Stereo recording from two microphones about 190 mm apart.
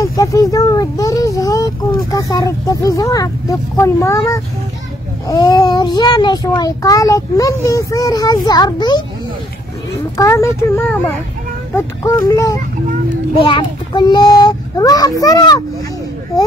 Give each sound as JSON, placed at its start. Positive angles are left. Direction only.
{"t": 0.0, "sound": "child singing", "side_deg": 20}
{"t": 5.3, "sound": "speech", "side_deg": 20}
{"t": 10.1, "sound": "a child's voice", "side_deg": 15}